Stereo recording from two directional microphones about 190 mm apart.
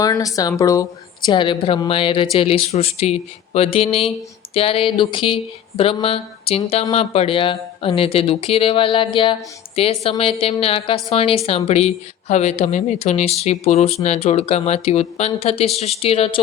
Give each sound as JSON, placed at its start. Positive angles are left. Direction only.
{"t": 0.0, "sound": "speech", "side_deg": 20}